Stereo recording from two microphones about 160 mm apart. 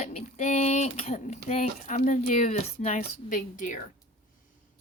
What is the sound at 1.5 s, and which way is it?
A woman's voice, 45° left (ahead or behind).